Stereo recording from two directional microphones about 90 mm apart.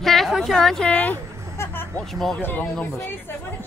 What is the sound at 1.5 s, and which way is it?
Music, 25° left (ahead or behind).